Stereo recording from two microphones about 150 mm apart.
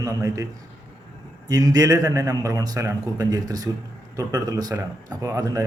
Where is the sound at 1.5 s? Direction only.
25° right (ahead or behind).